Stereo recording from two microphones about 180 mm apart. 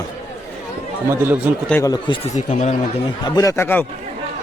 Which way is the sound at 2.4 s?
40° left (ahead or behind).